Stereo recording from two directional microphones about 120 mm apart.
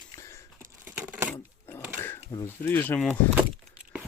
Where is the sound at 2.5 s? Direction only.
15° left (ahead or behind).